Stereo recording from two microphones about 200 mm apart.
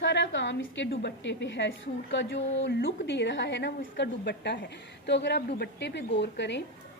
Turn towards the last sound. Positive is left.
turn(degrees=60)  # may be behind; listen again after turning